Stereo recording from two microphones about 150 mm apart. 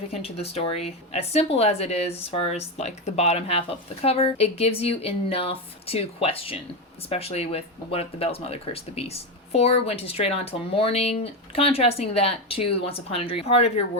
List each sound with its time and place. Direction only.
0.1 s speech: 40° left (ahead or behind)